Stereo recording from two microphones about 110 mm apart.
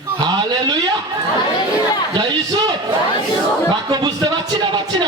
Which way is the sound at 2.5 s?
40° right (ahead or behind).